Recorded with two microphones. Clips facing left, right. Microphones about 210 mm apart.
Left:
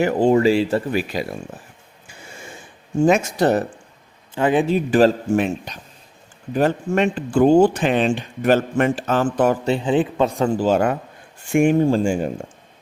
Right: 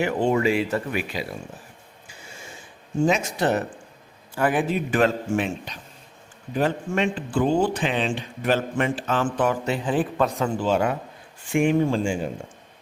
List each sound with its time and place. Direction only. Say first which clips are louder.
0.0 s a man's voice: left 6 dB; 35° left (ahead or behind)
3.1 s a man's voice: left 7 dB; 45° left (ahead or behind)
4.4 s a man's voice: left 5 dB; 25° left (ahead or behind); by 9.6 s 40° left (ahead or behind)
9.6 s a man's voice: left 5 dB; 25° left (ahead or behind); by 12.3 s 45° left (ahead or behind)